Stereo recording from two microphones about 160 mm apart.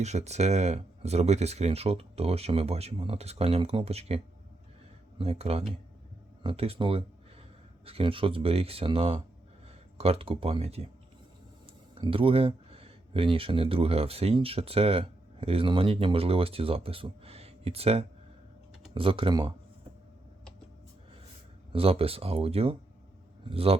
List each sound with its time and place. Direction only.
0.0 s speech: 45° right (ahead or behind)
11.9 s speech: 35° right (ahead or behind)
21.7 s speech: 35° right (ahead or behind)